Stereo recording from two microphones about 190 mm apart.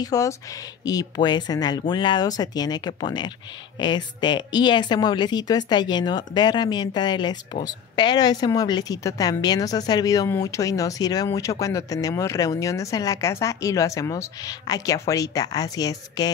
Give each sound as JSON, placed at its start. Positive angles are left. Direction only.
{"t": 0.0, "sound": "a woman's voice", "side_deg": 20}